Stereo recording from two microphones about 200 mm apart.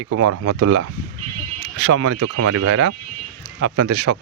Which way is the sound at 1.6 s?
65° right (ahead or behind).